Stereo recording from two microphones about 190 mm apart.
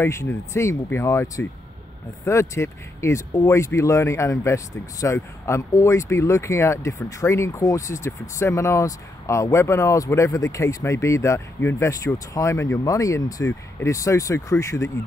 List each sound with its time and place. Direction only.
0.0 s speech: 15° left (ahead or behind)